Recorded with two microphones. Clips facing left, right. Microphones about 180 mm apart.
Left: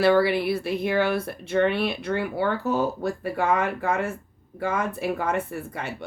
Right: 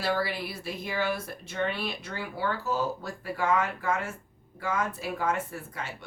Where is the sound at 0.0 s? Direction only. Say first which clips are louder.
Left 10 dB; 65° left (ahead or behind).